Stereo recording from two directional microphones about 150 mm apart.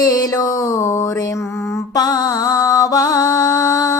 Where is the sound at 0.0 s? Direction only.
25° left (ahead or behind).